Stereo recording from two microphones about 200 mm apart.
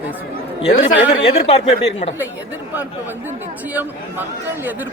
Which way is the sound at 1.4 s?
30° left (ahead or behind).